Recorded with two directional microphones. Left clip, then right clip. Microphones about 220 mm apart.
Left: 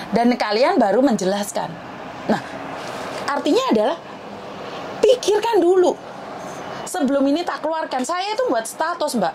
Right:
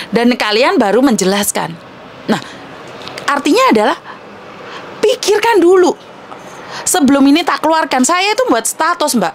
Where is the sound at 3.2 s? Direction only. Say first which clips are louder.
Right 9 dB; 35° right (ahead or behind).